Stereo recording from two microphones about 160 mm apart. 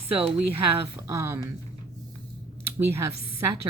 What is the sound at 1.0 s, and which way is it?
Speech, 15° right (ahead or behind).